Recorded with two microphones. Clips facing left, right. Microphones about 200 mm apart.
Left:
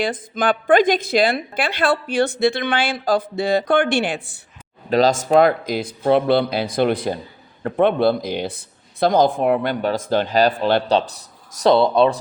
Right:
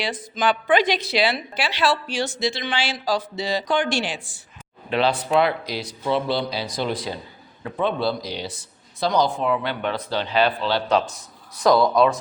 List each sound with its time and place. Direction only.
0.0 s a woman's voice: 50° left (ahead or behind)
4.9 s a woman's voice: 40° left (ahead or behind)
11.6 s speech: 30° left (ahead or behind)